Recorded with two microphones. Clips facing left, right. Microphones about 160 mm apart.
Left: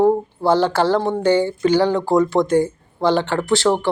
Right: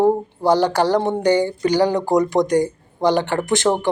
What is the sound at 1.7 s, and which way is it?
Speech, 40° right (ahead or behind).